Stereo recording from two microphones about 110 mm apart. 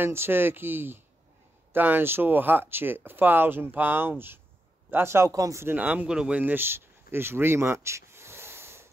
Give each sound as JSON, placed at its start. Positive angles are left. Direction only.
{"t": 0.0, "sound": "speech", "side_deg": -20}
{"t": 5.8, "sound": "speech", "side_deg": -10}